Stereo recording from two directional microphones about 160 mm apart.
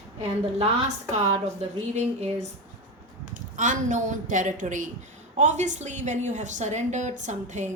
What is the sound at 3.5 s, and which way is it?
A woman's voice, 50° right (ahead or behind).